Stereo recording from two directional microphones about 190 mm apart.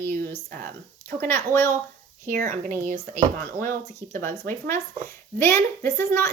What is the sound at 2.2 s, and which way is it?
Speech, 45° right (ahead or behind).